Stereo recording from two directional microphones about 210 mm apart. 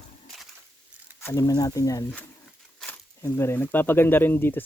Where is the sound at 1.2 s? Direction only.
15° left (ahead or behind).